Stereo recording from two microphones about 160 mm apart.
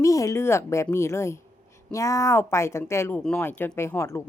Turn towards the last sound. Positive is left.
turn(degrees=15)  # may be behind; listen again after turning